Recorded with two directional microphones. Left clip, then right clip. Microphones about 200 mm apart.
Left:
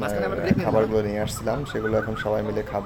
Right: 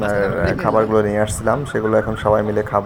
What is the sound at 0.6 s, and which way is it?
Speech, 10° right (ahead or behind).